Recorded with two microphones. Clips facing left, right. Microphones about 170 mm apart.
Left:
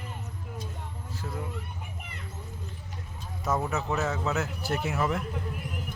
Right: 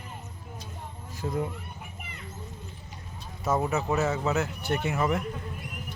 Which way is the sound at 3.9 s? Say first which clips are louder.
Right 2 dB; centre (ahead or behind).